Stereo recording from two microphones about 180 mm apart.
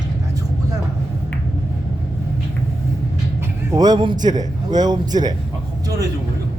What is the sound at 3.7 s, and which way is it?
A man's voice, 20° right (ahead or behind).